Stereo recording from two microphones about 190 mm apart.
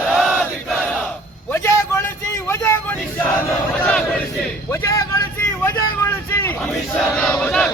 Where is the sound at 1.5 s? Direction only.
15° left (ahead or behind).